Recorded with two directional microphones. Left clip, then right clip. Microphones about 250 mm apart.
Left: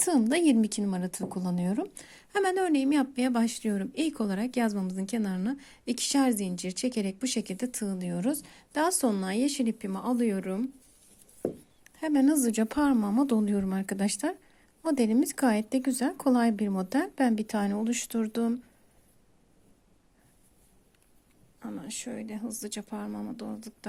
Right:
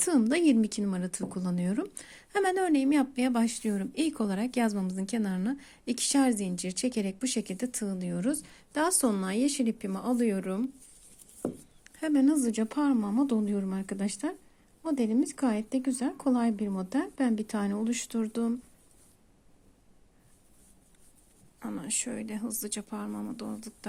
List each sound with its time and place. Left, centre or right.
0.0 s speech: centre
11.8 s speech: centre
21.6 s speech: centre